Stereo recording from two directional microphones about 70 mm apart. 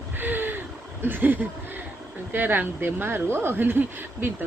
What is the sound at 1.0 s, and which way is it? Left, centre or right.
A woman's voice, right.